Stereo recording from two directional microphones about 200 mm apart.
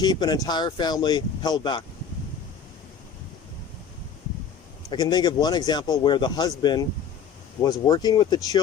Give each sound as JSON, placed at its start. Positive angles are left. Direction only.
{"t": 0.0, "sound": "speech", "side_deg": 20}
{"t": 4.9, "sound": "speech", "side_deg": 20}